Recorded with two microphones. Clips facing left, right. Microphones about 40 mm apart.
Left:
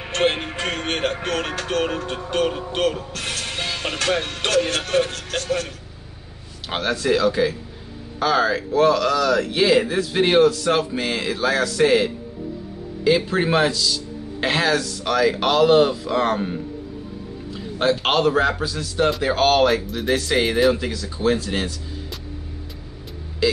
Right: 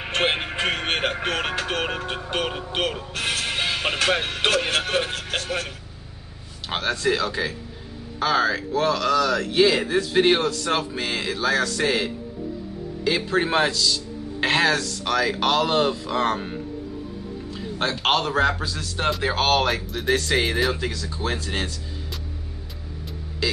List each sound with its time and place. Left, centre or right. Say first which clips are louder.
0.0 s speech: left 2 dB; centre
6.7 s a man's voice: left 2 dB; centre
17.7 s a man's voice: left 3 dB; centre
23.4 s speech: left 6 dB; centre